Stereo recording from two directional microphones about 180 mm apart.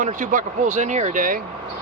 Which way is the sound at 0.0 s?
45° right (ahead or behind).